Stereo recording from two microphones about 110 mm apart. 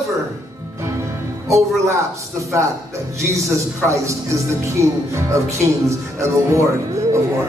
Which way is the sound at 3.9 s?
30° right (ahead or behind).